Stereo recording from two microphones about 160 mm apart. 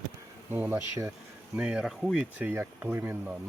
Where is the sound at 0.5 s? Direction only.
15° right (ahead or behind).